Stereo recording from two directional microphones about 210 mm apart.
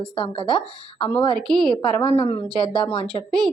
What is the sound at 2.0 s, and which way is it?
Speech, 25° left (ahead or behind).